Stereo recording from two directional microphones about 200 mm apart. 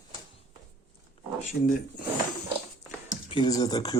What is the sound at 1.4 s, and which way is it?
Speech, 40° left (ahead or behind).